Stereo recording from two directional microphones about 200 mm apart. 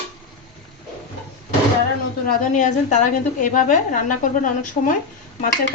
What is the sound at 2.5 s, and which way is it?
A woman's voice, 40° left (ahead or behind).